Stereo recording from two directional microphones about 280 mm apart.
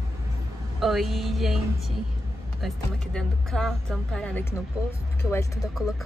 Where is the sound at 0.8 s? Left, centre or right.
Centre.